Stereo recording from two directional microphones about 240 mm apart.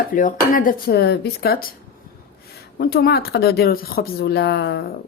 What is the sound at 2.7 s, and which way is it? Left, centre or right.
Speech, left.